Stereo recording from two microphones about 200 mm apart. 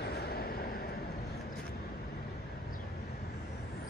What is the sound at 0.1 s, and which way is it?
Vehicle, 50° left (ahead or behind).